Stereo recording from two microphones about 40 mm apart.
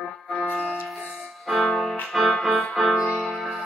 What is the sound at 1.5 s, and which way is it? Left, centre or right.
Music, centre.